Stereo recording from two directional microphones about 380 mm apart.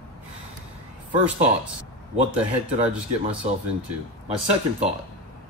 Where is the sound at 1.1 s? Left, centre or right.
Centre.